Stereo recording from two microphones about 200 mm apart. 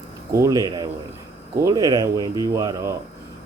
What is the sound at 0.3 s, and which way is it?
Speech, 15° right (ahead or behind).